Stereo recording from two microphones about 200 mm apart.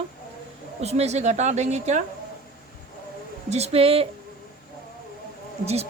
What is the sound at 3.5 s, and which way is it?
Speech, 30° right (ahead or behind).